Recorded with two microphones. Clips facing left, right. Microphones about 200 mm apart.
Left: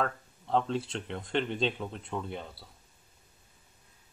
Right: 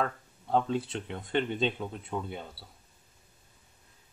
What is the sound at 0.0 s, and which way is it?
Speech, 5° right (ahead or behind).